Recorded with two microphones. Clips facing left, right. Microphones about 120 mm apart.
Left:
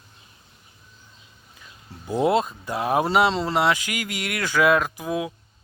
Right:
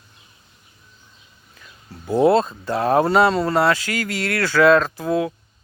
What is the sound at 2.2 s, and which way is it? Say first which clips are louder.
Speech: right 4 dB; 15° left (ahead or behind).